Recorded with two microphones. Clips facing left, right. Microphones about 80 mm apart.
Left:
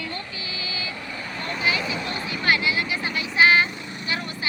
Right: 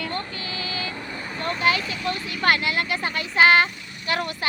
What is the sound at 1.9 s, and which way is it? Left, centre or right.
Speech, left.